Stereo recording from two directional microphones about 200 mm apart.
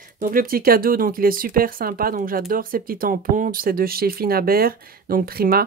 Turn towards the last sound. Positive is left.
turn(degrees=-50)  # may be behind; listen again after turning